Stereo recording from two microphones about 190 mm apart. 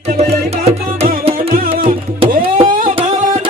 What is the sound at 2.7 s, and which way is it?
Music, 45° right (ahead or behind).